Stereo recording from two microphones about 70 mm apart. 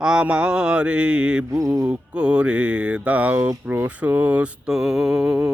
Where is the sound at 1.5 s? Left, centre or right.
Right.